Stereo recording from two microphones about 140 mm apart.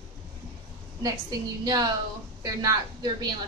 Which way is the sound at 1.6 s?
30° right (ahead or behind).